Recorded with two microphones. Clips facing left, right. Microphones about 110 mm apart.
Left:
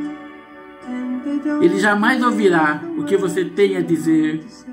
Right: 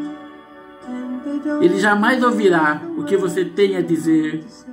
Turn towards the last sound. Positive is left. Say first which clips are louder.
# left 1 dB
turn(degrees=0)  # may be behind; listen again after turning